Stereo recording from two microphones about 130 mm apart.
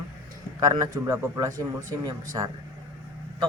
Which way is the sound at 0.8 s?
25° right (ahead or behind).